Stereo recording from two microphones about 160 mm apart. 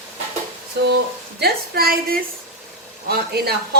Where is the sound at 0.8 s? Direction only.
90° right; by 2.2 s 70° right (ahead or behind).